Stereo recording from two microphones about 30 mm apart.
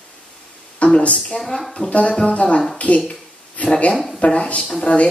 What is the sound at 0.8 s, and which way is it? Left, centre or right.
Speech, left.